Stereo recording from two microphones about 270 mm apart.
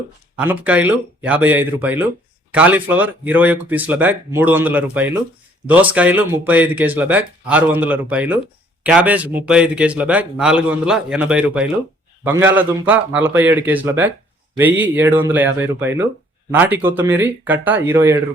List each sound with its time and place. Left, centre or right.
0.3 s speech: centre